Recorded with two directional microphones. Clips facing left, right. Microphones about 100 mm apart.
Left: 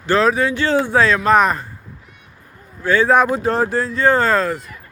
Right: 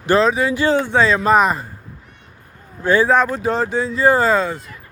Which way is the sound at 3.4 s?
Centre (ahead or behind).